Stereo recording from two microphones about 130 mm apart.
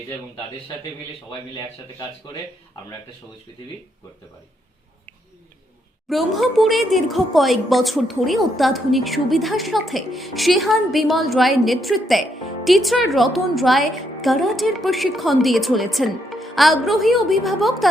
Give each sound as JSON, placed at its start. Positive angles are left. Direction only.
{"t": 1.3, "sound": "a man's voice", "side_deg": 35}
{"t": 6.1, "sound": "speech", "side_deg": 0}